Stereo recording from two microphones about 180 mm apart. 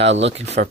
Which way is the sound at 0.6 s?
55° right (ahead or behind).